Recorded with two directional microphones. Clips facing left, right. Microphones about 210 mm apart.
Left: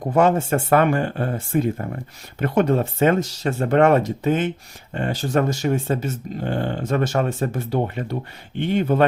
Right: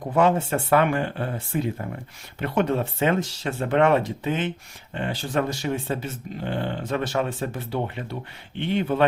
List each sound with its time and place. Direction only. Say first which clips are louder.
0.0 s speech: left 3 dB; 45° left (ahead or behind)